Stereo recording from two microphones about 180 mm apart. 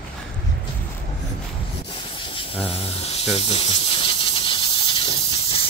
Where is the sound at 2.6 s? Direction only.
35° left (ahead or behind).